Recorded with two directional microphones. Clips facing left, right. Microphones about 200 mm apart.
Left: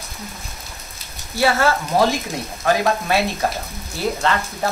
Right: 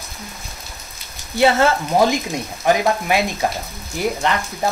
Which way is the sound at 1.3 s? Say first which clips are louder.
Right 3 dB; 20° right (ahead or behind).